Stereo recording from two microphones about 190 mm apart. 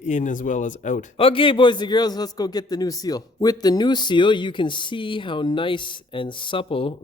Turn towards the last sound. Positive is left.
turn(degrees=30)  # may be behind; listen again after turning